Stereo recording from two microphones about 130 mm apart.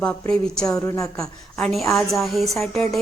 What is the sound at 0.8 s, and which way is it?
Speech, 25° left (ahead or behind).